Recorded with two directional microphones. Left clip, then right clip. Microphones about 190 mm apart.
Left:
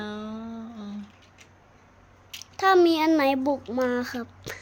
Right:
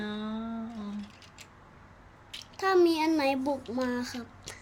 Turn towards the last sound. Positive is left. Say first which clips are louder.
# left 7 dB
turn(degrees=40)  # may be behind; listen again after turning